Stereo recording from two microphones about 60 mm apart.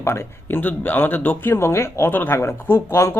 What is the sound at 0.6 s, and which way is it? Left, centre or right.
Speech, left.